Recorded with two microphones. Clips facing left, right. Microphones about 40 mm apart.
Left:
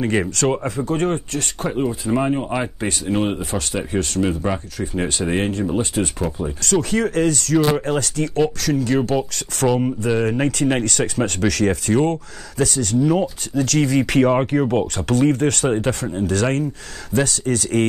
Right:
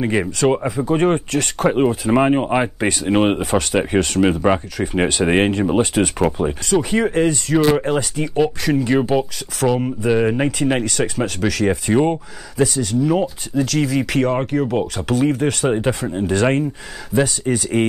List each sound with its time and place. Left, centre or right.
0.0 s speech: centre; by 1.4 s right
1.7 s speech: right
6.6 s speech: centre